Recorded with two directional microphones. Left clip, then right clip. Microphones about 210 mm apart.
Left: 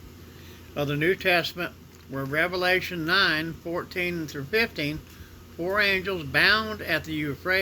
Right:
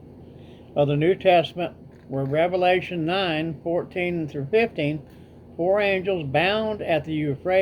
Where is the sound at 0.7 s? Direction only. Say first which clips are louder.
Right 5 dB; 15° left (ahead or behind).